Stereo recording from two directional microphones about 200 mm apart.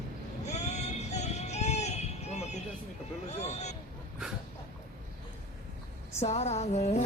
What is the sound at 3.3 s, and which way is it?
Vehicle, 35° left (ahead or behind).